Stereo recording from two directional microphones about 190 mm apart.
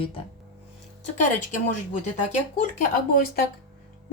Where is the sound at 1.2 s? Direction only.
45° left (ahead or behind).